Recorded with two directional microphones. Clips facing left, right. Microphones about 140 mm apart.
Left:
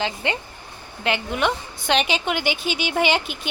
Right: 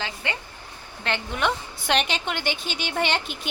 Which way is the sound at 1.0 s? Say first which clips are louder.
Left 3 dB; 10° left (ahead or behind).